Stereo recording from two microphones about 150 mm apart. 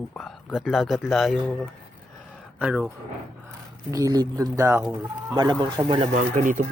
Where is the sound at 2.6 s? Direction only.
10° right (ahead or behind).